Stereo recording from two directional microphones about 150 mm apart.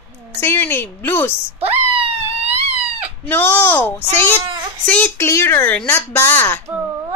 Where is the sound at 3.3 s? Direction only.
15° left (ahead or behind).